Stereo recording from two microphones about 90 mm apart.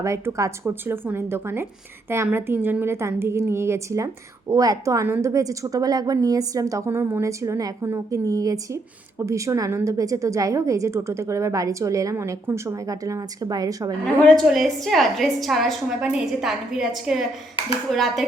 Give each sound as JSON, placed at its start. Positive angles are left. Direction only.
{"t": 0.0, "sound": "a woman's voice", "side_deg": -35}
{"t": 0.7, "sound": "a woman's voice", "side_deg": -25}
{"t": 14.0, "sound": "a woman's voice", "side_deg": 5}